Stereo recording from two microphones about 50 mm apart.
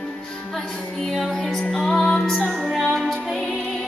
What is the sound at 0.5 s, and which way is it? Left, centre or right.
Music, centre.